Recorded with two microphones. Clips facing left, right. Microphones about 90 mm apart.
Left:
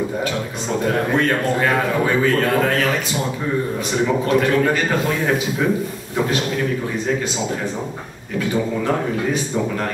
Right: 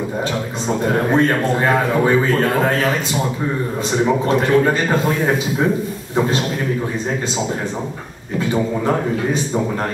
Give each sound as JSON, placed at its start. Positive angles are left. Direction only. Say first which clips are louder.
{"t": 0.8, "sound": "a man's voice", "louder": "right 3 dB", "side_deg": -30}
{"t": 4.0, "sound": "a man's voice", "louder": "right 1 dB", "side_deg": -25}